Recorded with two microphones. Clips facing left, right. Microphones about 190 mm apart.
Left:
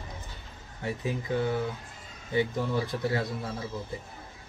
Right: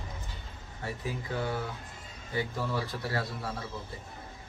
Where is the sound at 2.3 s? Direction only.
20° left (ahead or behind).